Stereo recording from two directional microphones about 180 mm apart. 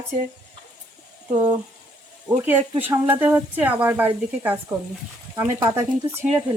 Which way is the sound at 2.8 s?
10° right (ahead or behind).